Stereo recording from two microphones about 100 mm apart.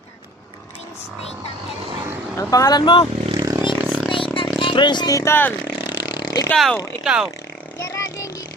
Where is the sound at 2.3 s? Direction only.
35° left (ahead or behind).